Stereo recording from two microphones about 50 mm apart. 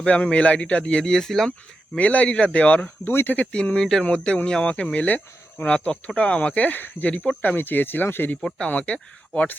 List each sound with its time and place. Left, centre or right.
0.0 s speech: left; by 1.5 s centre
2.0 s speech: left
3.0 s speech: left
3.5 s speech: centre
5.0 s speech: left
6.1 s speech: left
8.5 s speech: left